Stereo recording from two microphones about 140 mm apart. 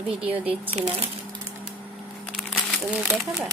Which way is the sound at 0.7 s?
45° right (ahead or behind).